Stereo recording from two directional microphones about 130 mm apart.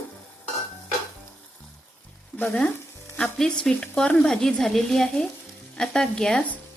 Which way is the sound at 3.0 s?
5° left (ahead or behind).